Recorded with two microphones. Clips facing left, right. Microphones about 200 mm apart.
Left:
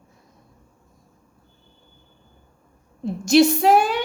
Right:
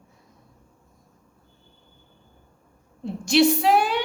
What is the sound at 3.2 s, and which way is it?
Speech, 45° left (ahead or behind).